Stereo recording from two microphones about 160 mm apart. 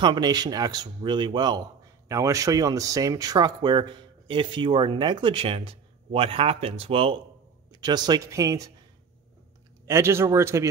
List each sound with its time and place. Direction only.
0.0 s speech: 25° right (ahead or behind)
9.8 s speech: 15° right (ahead or behind)